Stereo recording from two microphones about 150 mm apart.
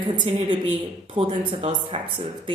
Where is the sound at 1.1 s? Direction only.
35° right (ahead or behind).